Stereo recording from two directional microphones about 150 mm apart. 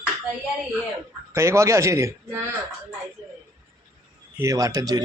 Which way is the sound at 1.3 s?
20° right (ahead or behind).